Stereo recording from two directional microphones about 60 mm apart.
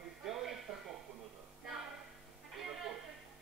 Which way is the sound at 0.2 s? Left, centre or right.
Centre.